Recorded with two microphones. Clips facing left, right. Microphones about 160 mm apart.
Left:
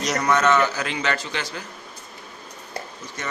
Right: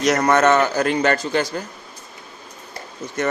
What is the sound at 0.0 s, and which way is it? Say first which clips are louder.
A man's voice: right 5 dB; 55° right (ahead or behind).